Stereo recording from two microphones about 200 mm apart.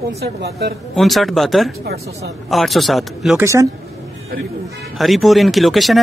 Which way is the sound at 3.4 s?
15° right (ahead or behind).